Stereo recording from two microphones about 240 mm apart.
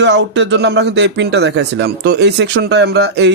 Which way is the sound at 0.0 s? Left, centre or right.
Right.